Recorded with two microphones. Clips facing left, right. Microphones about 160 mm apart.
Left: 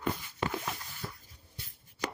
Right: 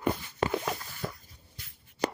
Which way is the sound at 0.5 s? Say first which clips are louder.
Right 6 dB; 85° right.